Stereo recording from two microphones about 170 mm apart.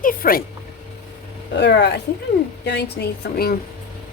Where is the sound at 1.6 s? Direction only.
80° left.